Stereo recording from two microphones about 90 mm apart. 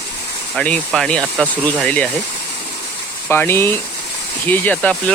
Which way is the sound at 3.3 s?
25° left (ahead or behind).